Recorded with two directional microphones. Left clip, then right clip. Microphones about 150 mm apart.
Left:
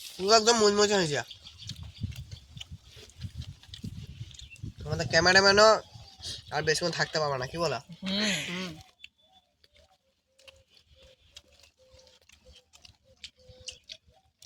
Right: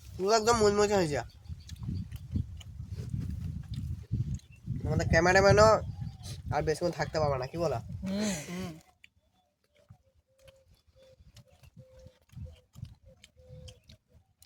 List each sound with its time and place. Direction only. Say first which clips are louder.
0.3 s speech: left 3 dB; 40° right (ahead or behind)
4.9 s speech: left 2 dB; 35° right (ahead or behind)
7.7 s speech: left 3 dB; 5° right (ahead or behind)
8.4 s speech: left 6 dB; 25° left (ahead or behind)